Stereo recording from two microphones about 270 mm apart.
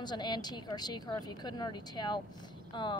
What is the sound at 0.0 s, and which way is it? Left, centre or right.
Speech, centre.